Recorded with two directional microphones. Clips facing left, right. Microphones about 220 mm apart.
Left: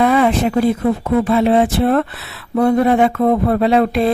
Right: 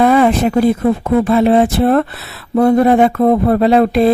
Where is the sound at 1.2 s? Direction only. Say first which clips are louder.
Right 3 dB; 45° right (ahead or behind).